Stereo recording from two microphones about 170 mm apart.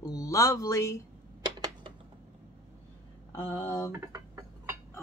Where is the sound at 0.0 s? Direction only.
20° left (ahead or behind).